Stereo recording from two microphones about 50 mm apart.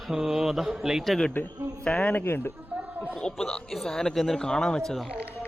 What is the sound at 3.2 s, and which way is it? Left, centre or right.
Speech, centre.